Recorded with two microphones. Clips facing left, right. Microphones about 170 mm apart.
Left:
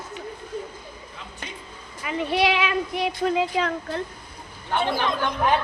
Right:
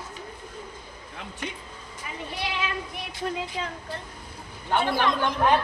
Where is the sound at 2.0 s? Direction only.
80° left.